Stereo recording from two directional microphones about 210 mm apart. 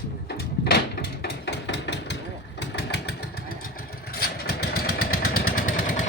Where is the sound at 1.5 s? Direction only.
55° left (ahead or behind).